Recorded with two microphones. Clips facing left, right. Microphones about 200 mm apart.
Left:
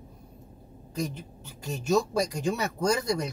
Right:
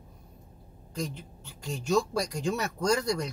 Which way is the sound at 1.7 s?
20° left (ahead or behind).